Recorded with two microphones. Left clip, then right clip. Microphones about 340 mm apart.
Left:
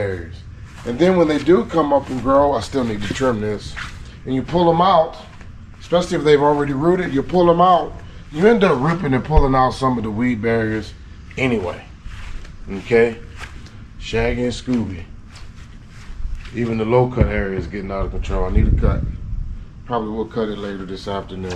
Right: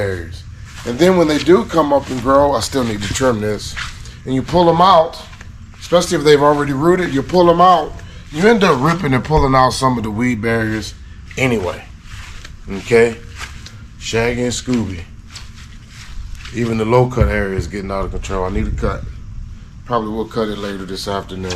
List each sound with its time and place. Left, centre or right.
0.8 s speech: centre
5.9 s speech: centre
12.1 s walk: centre
14.2 s speech: centre
16.5 s speech: centre
20.0 s a man's voice: left
20.4 s speech: centre